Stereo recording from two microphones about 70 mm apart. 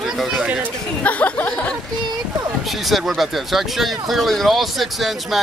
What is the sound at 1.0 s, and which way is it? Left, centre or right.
Speech, left.